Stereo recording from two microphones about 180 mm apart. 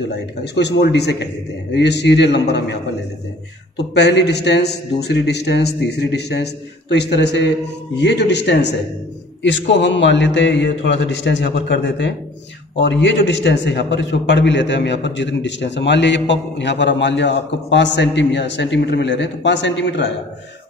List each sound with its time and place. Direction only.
0.4 s a man's voice: 70° left (ahead or behind)
9.4 s a man's voice: 80° left